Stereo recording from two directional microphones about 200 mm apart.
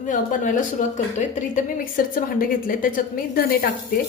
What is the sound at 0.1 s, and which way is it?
A woman's voice, 40° left (ahead or behind).